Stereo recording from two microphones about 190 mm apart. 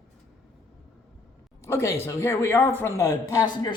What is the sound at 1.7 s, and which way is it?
A man's voice, 15° left (ahead or behind).